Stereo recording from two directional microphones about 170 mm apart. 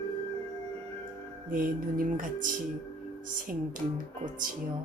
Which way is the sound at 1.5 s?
55° right (ahead or behind).